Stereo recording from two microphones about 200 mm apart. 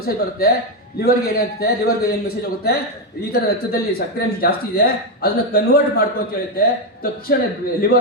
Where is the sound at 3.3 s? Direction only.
50° left (ahead or behind).